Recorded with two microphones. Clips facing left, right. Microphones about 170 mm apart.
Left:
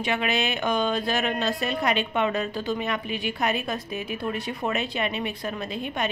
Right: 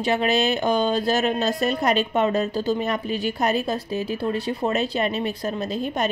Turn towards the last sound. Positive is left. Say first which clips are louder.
# right 5 dB
turn(degrees=-40)  # may be behind; listen again after turning